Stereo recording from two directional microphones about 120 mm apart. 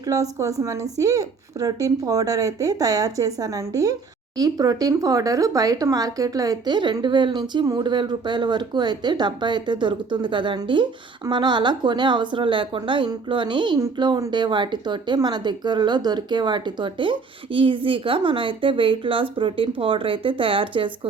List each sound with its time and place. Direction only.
0.0 s a woman's voice: 30° right (ahead or behind); by 21.1 s 45° right (ahead or behind)